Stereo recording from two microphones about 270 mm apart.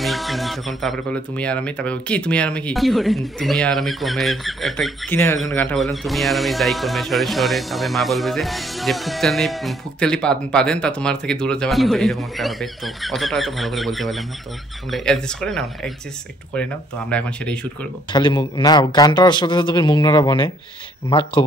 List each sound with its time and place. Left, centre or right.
0.0 s speech: centre
5.1 s a man's voice: centre
17.1 s speech: centre
18.1 s a man's voice: centre